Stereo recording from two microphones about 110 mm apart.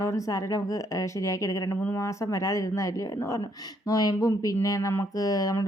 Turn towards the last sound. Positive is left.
turn(degrees=30)  # may be behind; listen again after turning